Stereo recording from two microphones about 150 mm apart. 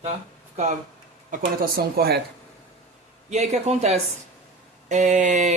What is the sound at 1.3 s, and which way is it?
Speech, 80° right.